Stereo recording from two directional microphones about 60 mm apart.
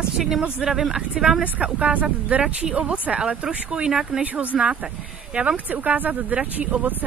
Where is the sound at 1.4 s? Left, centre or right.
Right.